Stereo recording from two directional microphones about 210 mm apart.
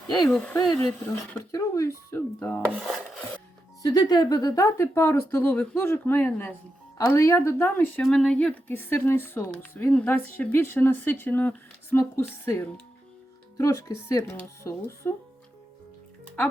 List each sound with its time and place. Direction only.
0.3 s a woman's voice: 5° left (ahead or behind)
3.8 s a woman's voice: 15° left (ahead or behind)